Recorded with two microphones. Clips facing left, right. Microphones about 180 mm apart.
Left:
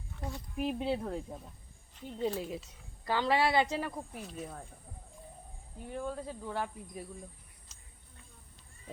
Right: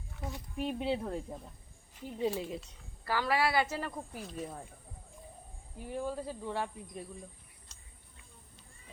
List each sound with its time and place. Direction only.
0.2 s speech: centre (ahead or behind)
3.0 s a woman's voice: 20° left (ahead or behind)
3.9 s speech: centre (ahead or behind)
5.9 s speech: 5° right (ahead or behind)
7.7 s a sound: 5° left (ahead or behind)